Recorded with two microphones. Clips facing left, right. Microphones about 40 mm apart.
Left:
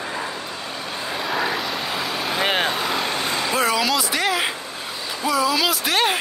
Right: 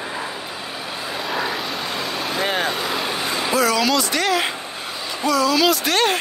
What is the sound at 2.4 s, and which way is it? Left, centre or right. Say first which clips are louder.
Vehicle: left 1 dB; left.